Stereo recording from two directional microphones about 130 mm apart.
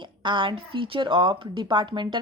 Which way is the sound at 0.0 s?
35° right (ahead or behind).